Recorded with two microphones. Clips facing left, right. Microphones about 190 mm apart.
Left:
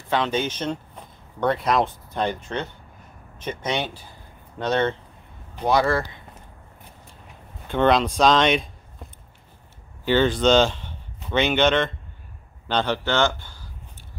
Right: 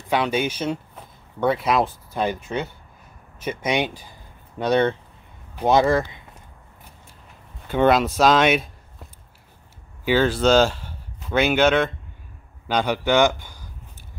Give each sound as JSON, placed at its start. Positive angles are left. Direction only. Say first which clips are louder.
{"t": 0.1, "sound": "speech", "louder": "right 1 dB", "side_deg": -10}
{"t": 7.6, "sound": "speech", "louder": "right 1 dB", "side_deg": -5}
{"t": 10.0, "sound": "a man's voice", "louder": "even", "side_deg": -5}